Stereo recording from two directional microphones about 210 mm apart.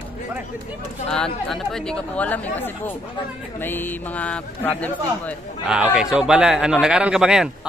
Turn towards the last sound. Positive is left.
turn(degrees=-5)  # may be behind; listen again after turning